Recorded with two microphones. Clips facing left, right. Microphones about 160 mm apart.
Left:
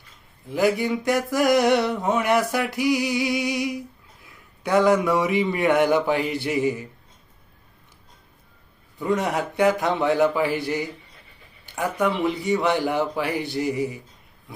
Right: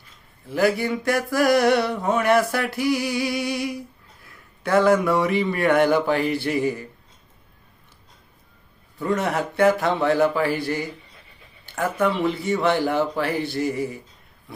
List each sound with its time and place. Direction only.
0.4 s a sound: 15° left (ahead or behind)
4.6 s speech: 15° left (ahead or behind)
9.0 s speech: 15° left (ahead or behind)